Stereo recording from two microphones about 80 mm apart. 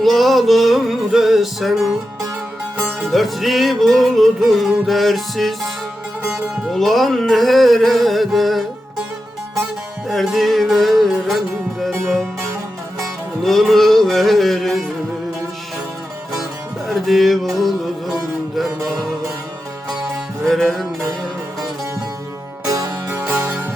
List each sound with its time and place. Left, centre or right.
0.0 s music: centre
3.1 s music: centre
6.2 s music: centre
10.1 s music: centre
13.0 s music: centre
16.9 s music: centre
20.5 s music: centre
22.6 s music: right
23.2 s music: centre